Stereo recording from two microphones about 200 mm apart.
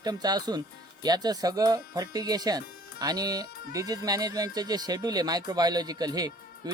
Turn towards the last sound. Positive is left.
turn(degrees=-20)  # may be behind; listen again after turning